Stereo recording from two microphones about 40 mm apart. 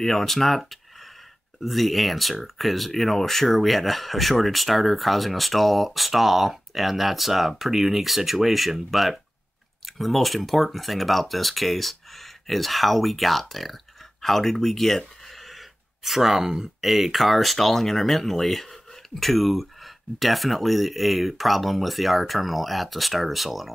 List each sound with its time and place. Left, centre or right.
0.0 s speech: centre